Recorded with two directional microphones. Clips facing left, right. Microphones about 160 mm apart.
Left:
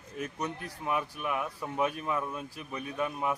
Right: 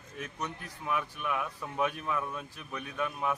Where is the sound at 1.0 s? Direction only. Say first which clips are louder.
Left 1 dB; 10° left (ahead or behind).